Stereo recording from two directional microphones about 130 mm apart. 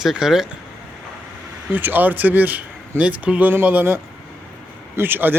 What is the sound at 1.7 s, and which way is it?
Speech, 15° right (ahead or behind).